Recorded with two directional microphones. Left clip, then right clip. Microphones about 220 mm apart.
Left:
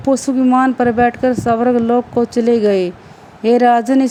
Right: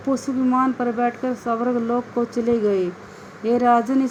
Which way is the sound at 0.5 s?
55° left (ahead or behind).